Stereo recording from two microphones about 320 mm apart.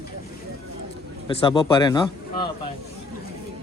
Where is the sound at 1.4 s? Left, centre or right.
Centre.